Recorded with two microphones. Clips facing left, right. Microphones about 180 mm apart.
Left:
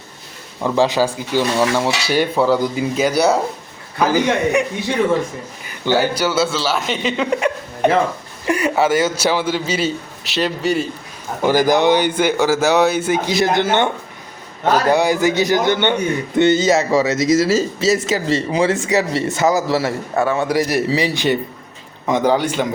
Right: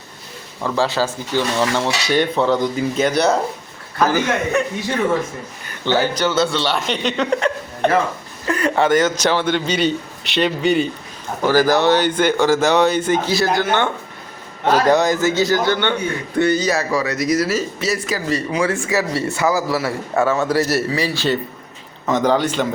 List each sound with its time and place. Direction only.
0.6 s cutlery: 15° left (ahead or behind)
5.8 s cutlery: 10° left (ahead or behind)
11.4 s cutlery: 15° left (ahead or behind)
13.3 s a man's voice: 20° left (ahead or behind)
20.2 s cutlery: 15° left (ahead or behind)